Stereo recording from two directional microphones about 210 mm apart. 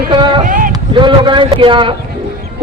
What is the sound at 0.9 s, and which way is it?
Speech, 20° right (ahead or behind).